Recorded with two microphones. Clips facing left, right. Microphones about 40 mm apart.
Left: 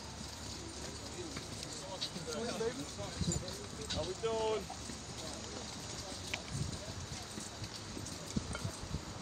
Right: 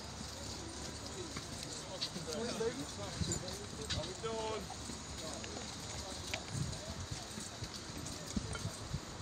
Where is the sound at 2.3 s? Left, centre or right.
Left.